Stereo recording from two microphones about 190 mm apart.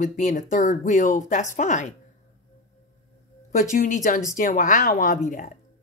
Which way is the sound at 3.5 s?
45° left (ahead or behind).